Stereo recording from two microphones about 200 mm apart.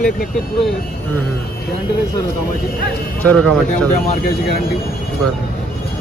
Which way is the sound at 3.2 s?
5° left (ahead or behind).